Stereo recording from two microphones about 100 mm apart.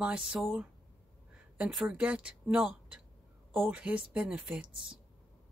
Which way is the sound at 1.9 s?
10° right (ahead or behind).